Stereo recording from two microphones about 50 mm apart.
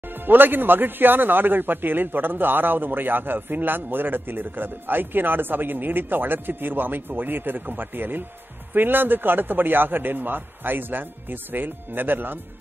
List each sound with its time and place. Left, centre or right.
0.1 s a man's voice: right